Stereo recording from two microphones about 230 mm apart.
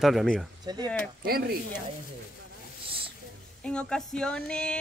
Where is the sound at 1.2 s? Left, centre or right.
Right.